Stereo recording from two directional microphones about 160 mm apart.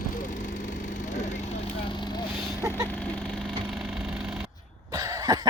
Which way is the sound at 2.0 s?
25° left (ahead or behind).